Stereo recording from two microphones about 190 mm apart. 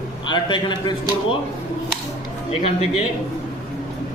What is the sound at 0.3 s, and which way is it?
A man's voice, 25° left (ahead or behind).